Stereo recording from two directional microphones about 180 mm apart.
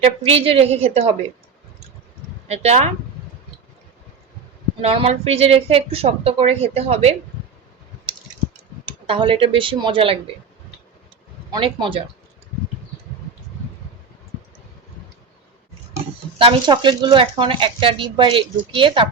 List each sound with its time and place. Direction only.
0.0 s a woman's voice: 30° right (ahead or behind)
2.5 s a woman's voice: 35° right (ahead or behind)
4.8 s a woman's voice: 35° right (ahead or behind)
8.9 s speech: 30° right (ahead or behind)
11.5 s speech: 25° right (ahead or behind)
16.4 s speech: 30° right (ahead or behind)